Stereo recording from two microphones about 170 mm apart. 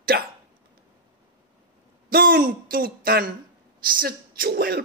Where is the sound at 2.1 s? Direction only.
55° right (ahead or behind).